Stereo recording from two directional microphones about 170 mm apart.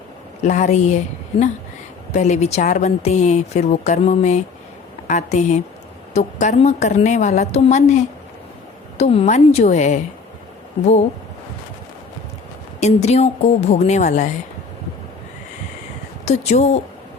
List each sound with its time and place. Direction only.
0.4 s a woman's voice: 45° left (ahead or behind)
12.8 s a woman's voice: 40° left (ahead or behind)
16.2 s a woman's voice: 40° left (ahead or behind)